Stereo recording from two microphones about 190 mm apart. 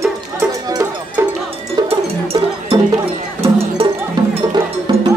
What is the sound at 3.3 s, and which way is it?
Cowbell, 30° right (ahead or behind).